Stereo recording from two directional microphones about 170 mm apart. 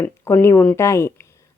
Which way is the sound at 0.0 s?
15° left (ahead or behind).